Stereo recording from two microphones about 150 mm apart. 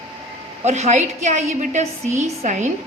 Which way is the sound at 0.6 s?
50° right (ahead or behind).